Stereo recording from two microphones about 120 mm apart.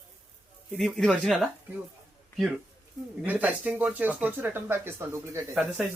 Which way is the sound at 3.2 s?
10° right (ahead or behind).